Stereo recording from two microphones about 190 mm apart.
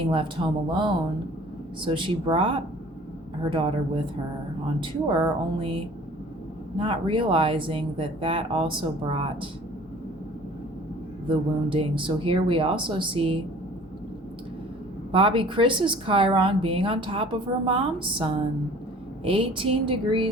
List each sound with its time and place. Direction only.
0.0 s a woman's voice: 25° right (ahead or behind)
6.7 s a woman's voice: 25° right (ahead or behind)
11.3 s a woman's voice: 25° right (ahead or behind)
15.1 s a woman's voice: 25° right (ahead or behind)